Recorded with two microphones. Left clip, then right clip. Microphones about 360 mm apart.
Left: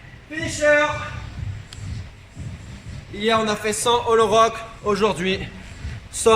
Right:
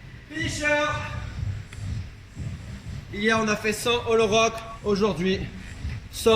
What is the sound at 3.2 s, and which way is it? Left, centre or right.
A man's voice, centre.